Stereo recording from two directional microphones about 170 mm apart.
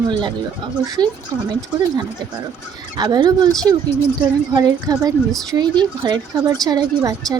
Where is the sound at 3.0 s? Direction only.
25° right (ahead or behind).